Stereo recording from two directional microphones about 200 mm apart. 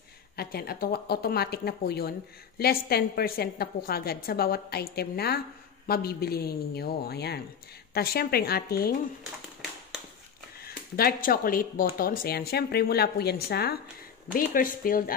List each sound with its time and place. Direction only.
0.4 s speech: 50° left (ahead or behind)
10.6 s speech: 50° left (ahead or behind)